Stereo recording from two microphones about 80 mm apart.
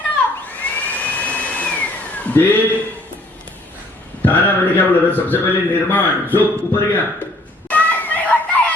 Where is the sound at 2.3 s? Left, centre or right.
Left.